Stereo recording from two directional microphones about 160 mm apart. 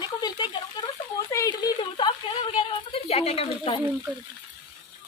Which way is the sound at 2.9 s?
40° left (ahead or behind).